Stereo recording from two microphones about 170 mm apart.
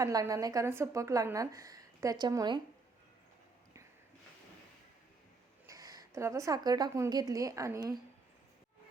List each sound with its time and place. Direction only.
0.0 s a woman's voice: 20° right (ahead or behind)
5.6 s a woman's voice: 20° right (ahead or behind)